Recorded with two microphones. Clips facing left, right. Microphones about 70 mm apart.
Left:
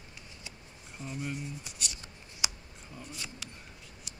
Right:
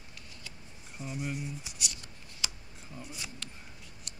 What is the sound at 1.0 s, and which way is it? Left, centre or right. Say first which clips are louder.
Speech: right 1 dB; centre.